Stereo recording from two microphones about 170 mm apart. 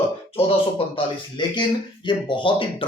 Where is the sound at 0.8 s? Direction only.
35° left (ahead or behind).